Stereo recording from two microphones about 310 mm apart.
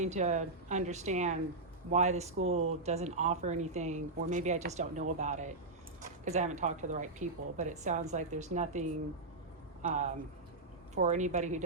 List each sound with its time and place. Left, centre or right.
0.0 s speech: right